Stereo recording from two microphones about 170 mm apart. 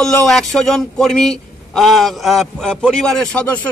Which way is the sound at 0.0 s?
Centre (ahead or behind).